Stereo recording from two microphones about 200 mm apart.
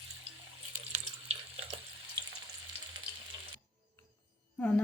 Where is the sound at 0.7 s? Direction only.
35° right (ahead or behind).